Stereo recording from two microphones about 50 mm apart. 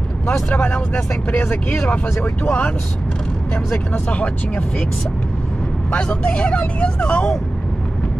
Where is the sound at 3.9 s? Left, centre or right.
Left.